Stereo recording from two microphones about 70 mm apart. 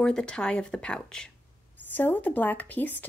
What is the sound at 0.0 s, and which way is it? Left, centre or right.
Speech, centre.